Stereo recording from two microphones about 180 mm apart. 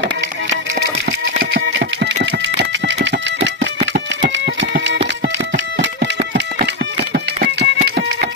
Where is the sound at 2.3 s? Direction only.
70° right (ahead or behind).